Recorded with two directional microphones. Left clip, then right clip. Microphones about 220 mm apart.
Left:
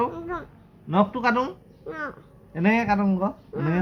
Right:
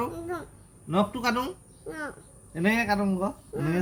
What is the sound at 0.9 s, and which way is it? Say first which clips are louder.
Speech: left 4 dB; 20° right (ahead or behind).